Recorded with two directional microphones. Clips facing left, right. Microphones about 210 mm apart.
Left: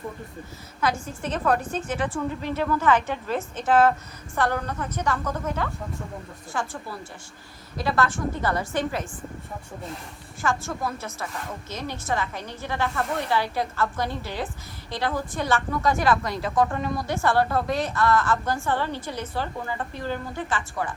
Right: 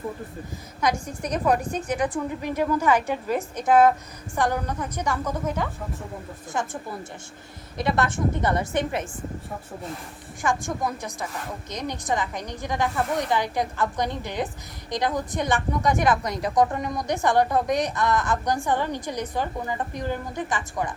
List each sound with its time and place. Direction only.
0.8 s a woman's voice: 15° right (ahead or behind)
7.8 s a woman's voice: 20° right (ahead or behind)
10.4 s a woman's voice: 15° right (ahead or behind)